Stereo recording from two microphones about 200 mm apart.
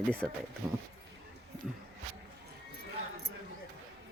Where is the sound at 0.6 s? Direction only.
15° right (ahead or behind).